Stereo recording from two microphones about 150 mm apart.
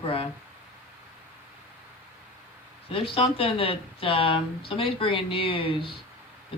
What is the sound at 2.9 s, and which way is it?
Speech, 40° left (ahead or behind).